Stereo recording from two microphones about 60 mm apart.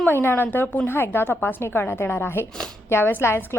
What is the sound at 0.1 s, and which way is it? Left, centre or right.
A woman's voice, left.